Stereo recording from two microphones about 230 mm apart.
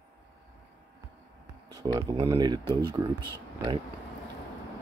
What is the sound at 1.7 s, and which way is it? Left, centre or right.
Speech, centre.